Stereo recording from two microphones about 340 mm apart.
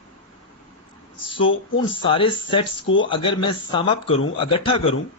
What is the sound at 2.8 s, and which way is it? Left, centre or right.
Speech, left.